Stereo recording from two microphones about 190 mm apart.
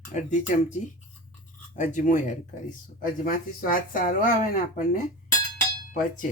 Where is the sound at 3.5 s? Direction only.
45° left (ahead or behind).